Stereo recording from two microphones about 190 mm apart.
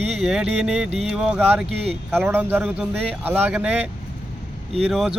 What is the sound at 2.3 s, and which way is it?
Speech, 10° right (ahead or behind).